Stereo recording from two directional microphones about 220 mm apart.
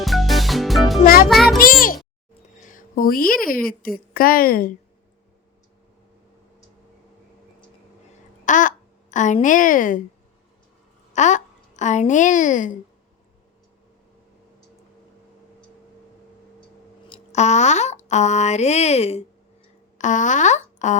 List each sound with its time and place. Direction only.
0.0 s music: centre (ahead or behind)
0.9 s music: 40° left (ahead or behind)
1.3 s music: centre (ahead or behind)
2.6 s a sound: 35° left (ahead or behind)
3.4 s speech: 40° left (ahead or behind)
8.4 s speech: 35° left (ahead or behind)
11.1 s speech: 35° left (ahead or behind)
17.1 s a sound: 30° left (ahead or behind)
20.0 s speech: 35° left (ahead or behind)